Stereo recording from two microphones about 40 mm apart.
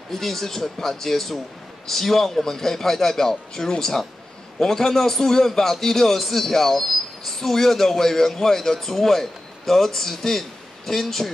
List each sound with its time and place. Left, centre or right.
0.1 s a man's voice: centre